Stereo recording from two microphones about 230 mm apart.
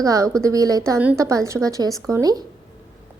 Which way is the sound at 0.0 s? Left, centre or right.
Centre.